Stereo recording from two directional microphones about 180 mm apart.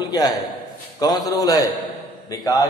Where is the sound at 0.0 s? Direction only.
20° left (ahead or behind).